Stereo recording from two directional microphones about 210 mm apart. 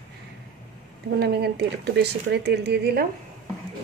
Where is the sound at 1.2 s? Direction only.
50° right (ahead or behind).